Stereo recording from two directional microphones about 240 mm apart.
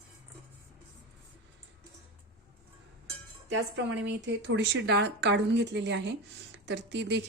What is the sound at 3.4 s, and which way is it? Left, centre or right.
A woman's voice, right.